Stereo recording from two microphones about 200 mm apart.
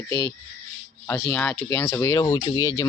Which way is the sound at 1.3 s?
5° left (ahead or behind).